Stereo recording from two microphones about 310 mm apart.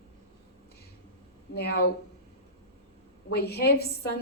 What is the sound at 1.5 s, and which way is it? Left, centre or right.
Speech, left.